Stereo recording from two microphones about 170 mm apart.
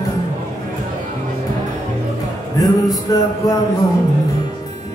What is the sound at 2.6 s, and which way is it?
Music, 20° left (ahead or behind).